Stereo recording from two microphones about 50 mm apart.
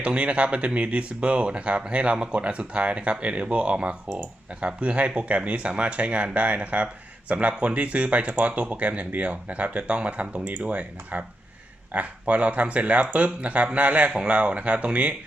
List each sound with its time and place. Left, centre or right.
0.0 s speech: right